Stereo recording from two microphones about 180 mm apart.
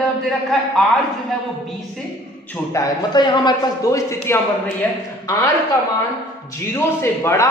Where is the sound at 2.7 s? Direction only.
20° left (ahead or behind).